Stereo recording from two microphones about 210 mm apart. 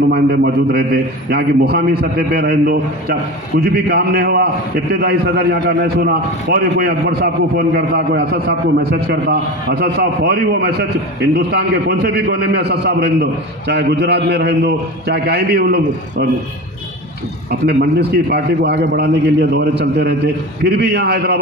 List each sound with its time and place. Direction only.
0.1 s a man's voice: 50° right (ahead or behind)
17.5 s a man's voice: 50° right (ahead or behind)